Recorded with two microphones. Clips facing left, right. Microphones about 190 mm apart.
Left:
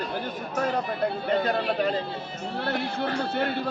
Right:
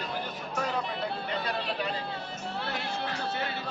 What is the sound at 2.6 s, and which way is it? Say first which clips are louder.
Speech: left 8 dB; 55° left (ahead or behind).